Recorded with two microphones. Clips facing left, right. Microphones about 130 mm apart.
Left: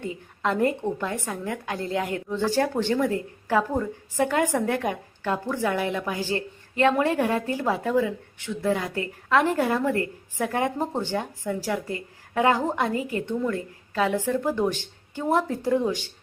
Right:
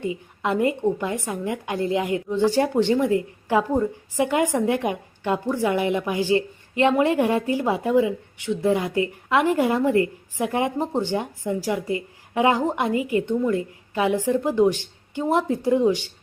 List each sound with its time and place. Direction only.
0.0 s a woman's voice: 10° right (ahead or behind)